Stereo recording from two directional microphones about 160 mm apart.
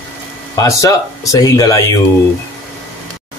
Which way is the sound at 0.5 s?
20° left (ahead or behind).